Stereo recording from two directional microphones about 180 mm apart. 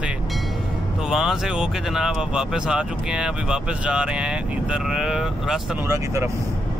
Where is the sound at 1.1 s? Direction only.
Centre (ahead or behind).